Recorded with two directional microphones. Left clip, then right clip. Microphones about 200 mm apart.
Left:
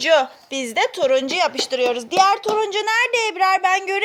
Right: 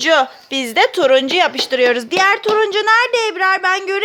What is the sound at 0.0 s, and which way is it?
A child's voice, 10° right (ahead or behind).